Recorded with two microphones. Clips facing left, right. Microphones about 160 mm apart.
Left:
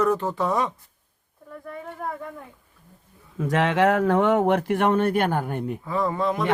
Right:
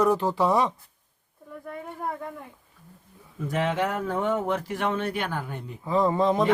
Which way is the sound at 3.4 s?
90° left.